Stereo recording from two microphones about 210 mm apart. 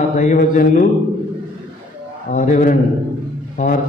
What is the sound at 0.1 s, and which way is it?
Mantra, 40° left (ahead or behind).